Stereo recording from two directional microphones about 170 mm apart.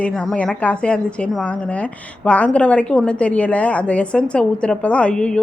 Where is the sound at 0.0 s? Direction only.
5° left (ahead or behind).